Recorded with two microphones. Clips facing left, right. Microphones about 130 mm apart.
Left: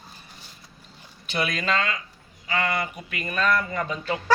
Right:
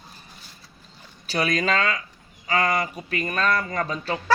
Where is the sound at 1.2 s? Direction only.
35° right (ahead or behind).